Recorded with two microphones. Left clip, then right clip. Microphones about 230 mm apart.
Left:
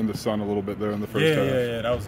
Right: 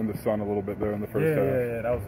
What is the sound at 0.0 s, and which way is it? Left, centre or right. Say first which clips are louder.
A man's voice: left 1 dB; left.